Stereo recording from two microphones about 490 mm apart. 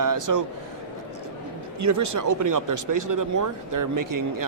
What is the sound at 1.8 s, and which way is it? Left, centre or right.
Speech, right.